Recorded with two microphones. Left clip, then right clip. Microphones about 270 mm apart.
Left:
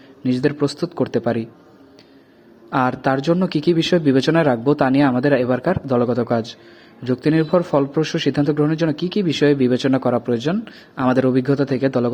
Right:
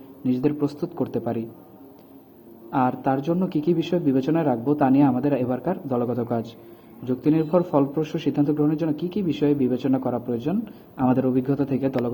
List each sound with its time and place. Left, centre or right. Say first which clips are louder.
0.2 s a man's voice: left 4 dB; left
2.6 s a man's voice: left 4 dB; left